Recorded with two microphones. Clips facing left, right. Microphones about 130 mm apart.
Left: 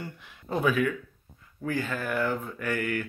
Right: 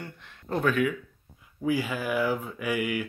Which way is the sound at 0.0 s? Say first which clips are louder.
Left 1 dB; 5° left (ahead or behind).